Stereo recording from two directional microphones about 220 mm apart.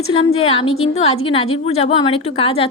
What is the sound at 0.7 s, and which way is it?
Speech, 70° left (ahead or behind).